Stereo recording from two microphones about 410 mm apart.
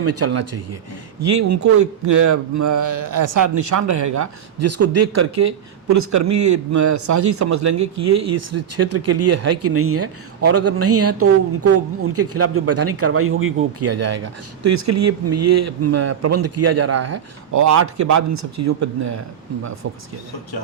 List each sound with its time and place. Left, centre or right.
0.0 s a man's voice: right